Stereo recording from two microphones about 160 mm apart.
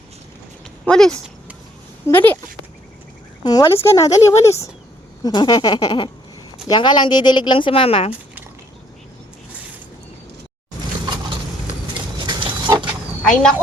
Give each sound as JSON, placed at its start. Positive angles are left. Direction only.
{"t": 0.9, "sound": "speech", "side_deg": 5}
{"t": 3.4, "sound": "speech", "side_deg": 20}
{"t": 12.2, "sound": "pig", "side_deg": -30}
{"t": 13.2, "sound": "speech", "side_deg": 5}